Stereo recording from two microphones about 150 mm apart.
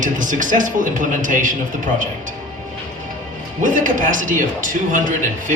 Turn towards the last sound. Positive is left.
turn(degrees=-60)  # may be behind; listen again after turning